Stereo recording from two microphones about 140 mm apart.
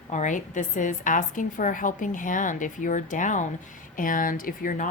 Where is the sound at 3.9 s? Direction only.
75° left (ahead or behind).